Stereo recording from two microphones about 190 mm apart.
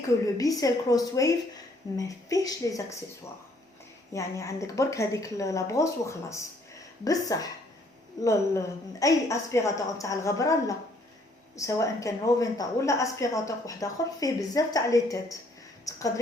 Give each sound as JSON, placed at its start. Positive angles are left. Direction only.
{"t": 0.3, "sound": "a woman's voice", "side_deg": 20}
{"t": 4.1, "sound": "a woman's voice", "side_deg": 15}